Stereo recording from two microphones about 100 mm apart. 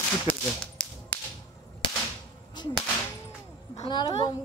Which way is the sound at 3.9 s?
45° left (ahead or behind).